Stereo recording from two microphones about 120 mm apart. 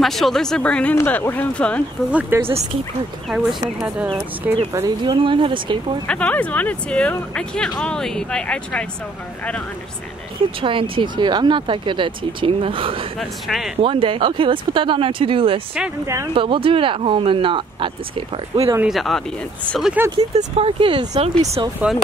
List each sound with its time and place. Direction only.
0.0 s speech: centre (ahead or behind)
2.0 s speech: 10° right (ahead or behind)
2.4 s speech: 60° right (ahead or behind)
3.3 s speech: 5° right (ahead or behind)
4.4 s speech: 15° right (ahead or behind)
5.0 s speech: 45° right (ahead or behind)
6.0 s speech: 10° left (ahead or behind)
10.6 s speech: 45° right (ahead or behind)
13.2 s speech: centre (ahead or behind)
13.8 s speech: 45° right (ahead or behind)
18.9 s speech: centre (ahead or behind)
20.2 s speech: 60° right (ahead or behind)
21.1 s speech: 65° right (ahead or behind)
21.8 s speech: 10° right (ahead or behind)